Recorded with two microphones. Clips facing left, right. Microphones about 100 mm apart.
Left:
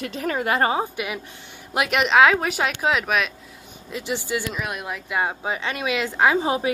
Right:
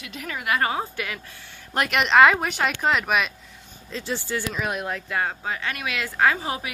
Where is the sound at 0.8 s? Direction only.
15° left (ahead or behind).